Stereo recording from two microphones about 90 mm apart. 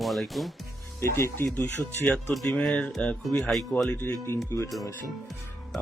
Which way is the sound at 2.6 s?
15° left (ahead or behind).